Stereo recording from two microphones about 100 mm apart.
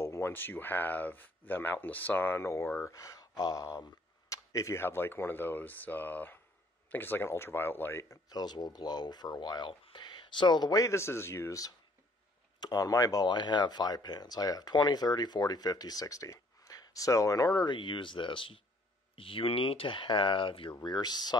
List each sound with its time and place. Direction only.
0.0 s speech: 25° left (ahead or behind)
8.3 s speech: 45° left (ahead or behind)
9.8 s a sound: 50° left (ahead or behind)
10.8 s speech: 30° left (ahead or behind)
12.5 s speech: 40° left (ahead or behind)
17.6 s speech: 55° left (ahead or behind)
20.7 s speech: 45° left (ahead or behind)